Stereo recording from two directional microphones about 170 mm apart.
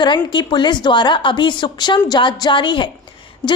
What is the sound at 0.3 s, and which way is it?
A woman's voice, 25° left (ahead or behind).